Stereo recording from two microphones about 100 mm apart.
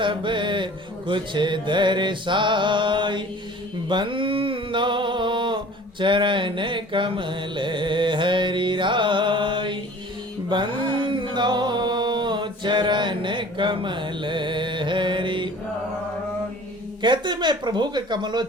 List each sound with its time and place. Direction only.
0.0 s mantra: 55° right (ahead or behind)
3.8 s a sound: 55° right (ahead or behind)
6.0 s mantra: 55° right (ahead or behind)
10.5 s music: 55° right (ahead or behind)
17.0 s mantra: 50° right (ahead or behind)